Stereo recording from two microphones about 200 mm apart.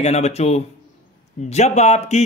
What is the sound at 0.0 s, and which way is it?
Speech, 35° left (ahead or behind).